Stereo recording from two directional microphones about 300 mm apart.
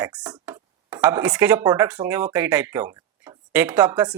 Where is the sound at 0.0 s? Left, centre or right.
Centre.